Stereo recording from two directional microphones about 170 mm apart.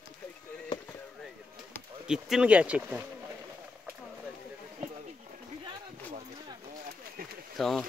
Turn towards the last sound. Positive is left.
turn(degrees=0)  # may be behind; listen again after turning